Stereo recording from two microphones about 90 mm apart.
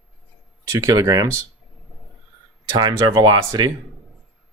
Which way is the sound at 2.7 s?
50° right (ahead or behind).